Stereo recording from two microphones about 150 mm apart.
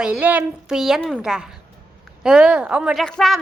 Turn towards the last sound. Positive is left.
turn(degrees=0)  # may be behind; listen again after turning